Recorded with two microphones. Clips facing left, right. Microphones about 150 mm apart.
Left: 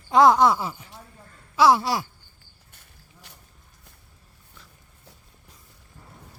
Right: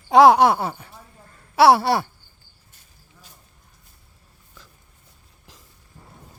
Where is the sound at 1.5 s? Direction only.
70° right (ahead or behind).